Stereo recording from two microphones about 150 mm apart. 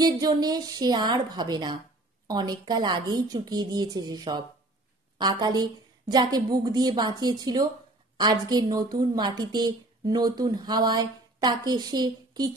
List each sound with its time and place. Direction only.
0.2 s a woman's voice: 25° right (ahead or behind)